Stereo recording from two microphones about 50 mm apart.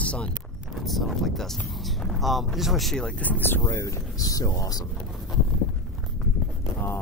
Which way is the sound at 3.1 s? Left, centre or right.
Left.